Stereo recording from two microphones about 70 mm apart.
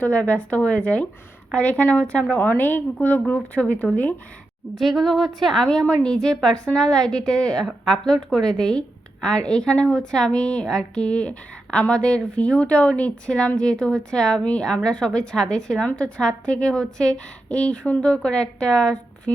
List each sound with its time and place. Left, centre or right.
0.0 s speech: left
4.7 s a woman's voice: centre
5.6 s a woman's voice: centre